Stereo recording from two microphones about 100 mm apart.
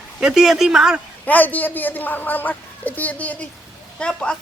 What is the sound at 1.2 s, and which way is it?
A woman's voice, 15° left (ahead or behind).